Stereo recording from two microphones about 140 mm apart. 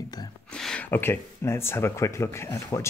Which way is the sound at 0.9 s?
15° left (ahead or behind).